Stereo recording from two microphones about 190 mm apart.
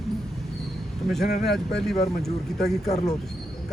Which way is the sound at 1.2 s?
55° left (ahead or behind).